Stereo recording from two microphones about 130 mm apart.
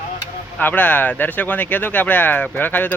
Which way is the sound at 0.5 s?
15° left (ahead or behind).